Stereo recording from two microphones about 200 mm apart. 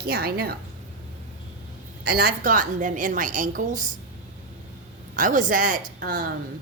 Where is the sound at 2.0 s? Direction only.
45° right (ahead or behind).